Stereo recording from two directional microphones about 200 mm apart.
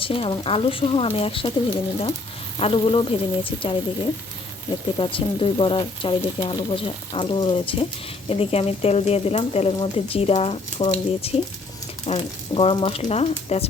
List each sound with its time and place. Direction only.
0.0 s speech: 25° left (ahead or behind)
2.6 s speech: 25° left (ahead or behind)
4.9 s speech: 25° left (ahead or behind)